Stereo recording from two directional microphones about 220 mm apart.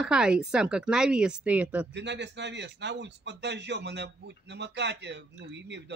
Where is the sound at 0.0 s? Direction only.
5° right (ahead or behind).